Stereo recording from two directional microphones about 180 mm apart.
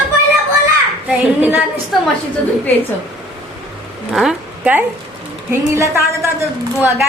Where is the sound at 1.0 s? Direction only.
10° right (ahead or behind).